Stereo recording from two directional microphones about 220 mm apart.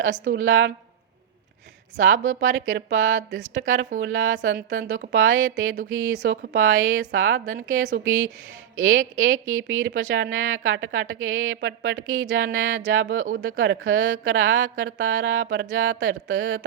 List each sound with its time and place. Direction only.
0.3 s speech: 65° right (ahead or behind)
2.0 s speech: 65° right (ahead or behind)
3.2 s speech: 35° right (ahead or behind)
3.5 s speech: 60° right (ahead or behind)